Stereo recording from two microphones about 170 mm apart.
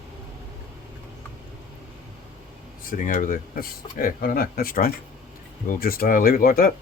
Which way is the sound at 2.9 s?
50° left (ahead or behind).